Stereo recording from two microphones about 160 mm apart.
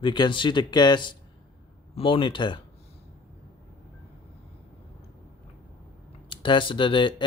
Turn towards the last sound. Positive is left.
turn(degrees=30)  # may be behind; listen again after turning